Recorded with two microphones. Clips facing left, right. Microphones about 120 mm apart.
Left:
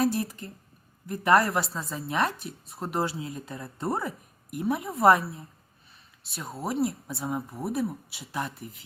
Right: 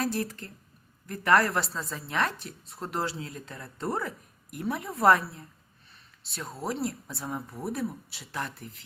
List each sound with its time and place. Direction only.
0.0 s a woman's voice: 15° left (ahead or behind)